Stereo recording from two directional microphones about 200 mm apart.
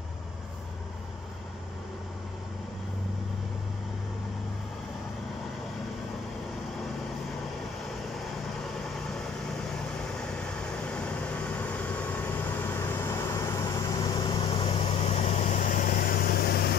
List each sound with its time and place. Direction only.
10.9 s vehicle: 5° left (ahead or behind); by 16.7 s 50° left (ahead or behind)